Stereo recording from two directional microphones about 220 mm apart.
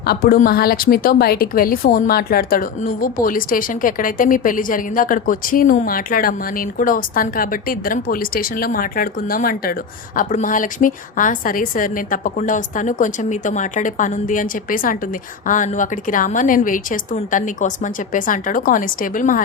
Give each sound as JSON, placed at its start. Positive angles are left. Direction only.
{"t": 0.0, "sound": "a woman's voice", "side_deg": 45}